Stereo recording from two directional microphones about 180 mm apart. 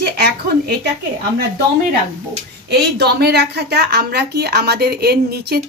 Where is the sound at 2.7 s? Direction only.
65° right (ahead or behind).